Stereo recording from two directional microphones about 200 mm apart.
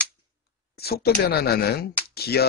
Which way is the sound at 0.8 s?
50° left (ahead or behind).